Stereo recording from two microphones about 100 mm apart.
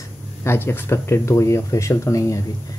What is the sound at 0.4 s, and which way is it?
Speech, 25° left (ahead or behind).